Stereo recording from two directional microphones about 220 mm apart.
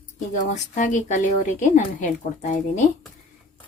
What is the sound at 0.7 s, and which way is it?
Speech, 35° left (ahead or behind).